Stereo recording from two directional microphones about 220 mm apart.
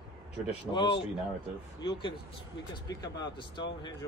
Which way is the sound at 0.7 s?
20° left (ahead or behind).